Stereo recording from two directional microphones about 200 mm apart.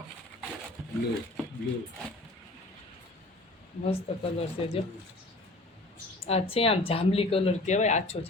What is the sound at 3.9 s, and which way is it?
Speech, 30° left (ahead or behind).